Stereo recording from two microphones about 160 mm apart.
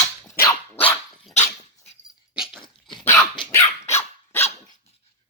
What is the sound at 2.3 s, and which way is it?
Dog, 5° right (ahead or behind).